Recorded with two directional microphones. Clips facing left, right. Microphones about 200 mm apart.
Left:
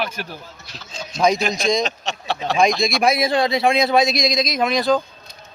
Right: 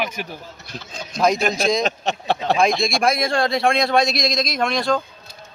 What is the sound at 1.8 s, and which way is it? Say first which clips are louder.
Speech: right 2 dB; 55° right (ahead or behind).